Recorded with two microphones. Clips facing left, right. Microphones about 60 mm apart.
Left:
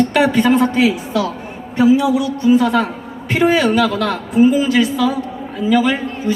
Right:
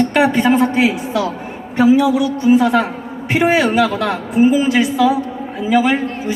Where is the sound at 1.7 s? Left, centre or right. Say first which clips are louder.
Right 1 dB; right.